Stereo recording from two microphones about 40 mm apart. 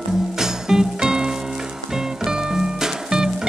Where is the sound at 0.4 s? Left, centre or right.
Centre.